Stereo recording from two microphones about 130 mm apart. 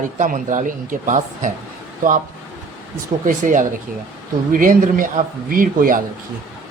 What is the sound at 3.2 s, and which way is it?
A man's voice, 80° right.